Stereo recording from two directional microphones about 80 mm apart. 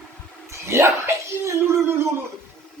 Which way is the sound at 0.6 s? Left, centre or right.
Right.